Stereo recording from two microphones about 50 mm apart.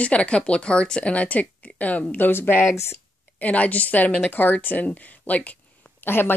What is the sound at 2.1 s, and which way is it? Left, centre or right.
Speech, left.